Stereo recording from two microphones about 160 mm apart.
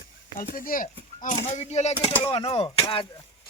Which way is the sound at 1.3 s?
45° left (ahead or behind).